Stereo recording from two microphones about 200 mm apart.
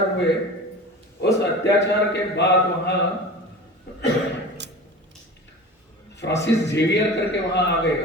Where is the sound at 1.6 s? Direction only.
60° left (ahead or behind).